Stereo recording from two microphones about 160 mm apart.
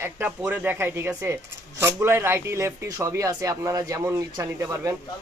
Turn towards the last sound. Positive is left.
turn(degrees=-20)  # may be behind; listen again after turning